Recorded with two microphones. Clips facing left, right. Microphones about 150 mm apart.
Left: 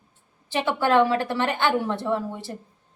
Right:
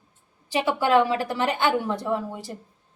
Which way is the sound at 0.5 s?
10° right (ahead or behind).